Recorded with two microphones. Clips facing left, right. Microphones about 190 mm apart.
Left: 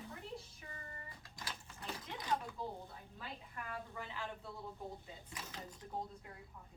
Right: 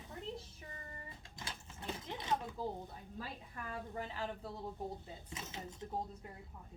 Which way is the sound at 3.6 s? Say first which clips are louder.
Right 4 dB; 40° right (ahead or behind).